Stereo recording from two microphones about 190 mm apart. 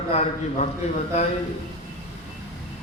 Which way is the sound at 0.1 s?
35° left (ahead or behind).